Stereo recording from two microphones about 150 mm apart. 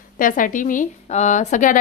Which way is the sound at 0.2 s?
65° left (ahead or behind).